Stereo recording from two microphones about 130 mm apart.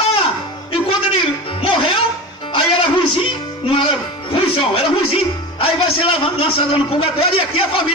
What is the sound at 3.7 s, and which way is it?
Speech, 45° left (ahead or behind).